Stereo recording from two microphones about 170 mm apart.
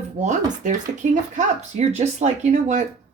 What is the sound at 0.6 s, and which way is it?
Speech, 45° right (ahead or behind).